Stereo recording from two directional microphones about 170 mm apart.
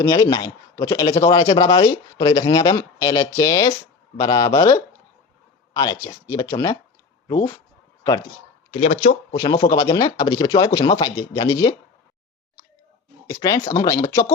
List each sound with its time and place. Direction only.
0.0 s a man's voice: 20° left (ahead or behind)
8.7 s speech: 40° left (ahead or behind)
9.3 s a man's voice: 25° left (ahead or behind)
13.2 s a man's voice: 20° left (ahead or behind)